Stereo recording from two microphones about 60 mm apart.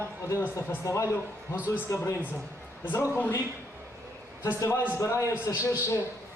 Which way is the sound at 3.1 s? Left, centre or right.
Left.